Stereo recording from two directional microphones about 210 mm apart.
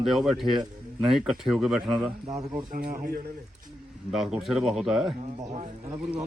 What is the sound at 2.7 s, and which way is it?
Speech, 45° right (ahead or behind).